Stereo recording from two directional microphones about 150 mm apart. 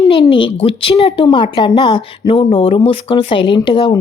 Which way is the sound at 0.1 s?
35° left (ahead or behind).